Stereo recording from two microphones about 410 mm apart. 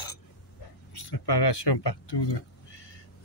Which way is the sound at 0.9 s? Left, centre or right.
Left.